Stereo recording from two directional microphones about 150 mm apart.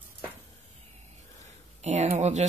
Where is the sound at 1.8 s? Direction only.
50° right (ahead or behind).